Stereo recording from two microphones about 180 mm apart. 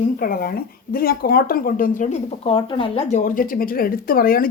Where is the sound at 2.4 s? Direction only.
30° left (ahead or behind).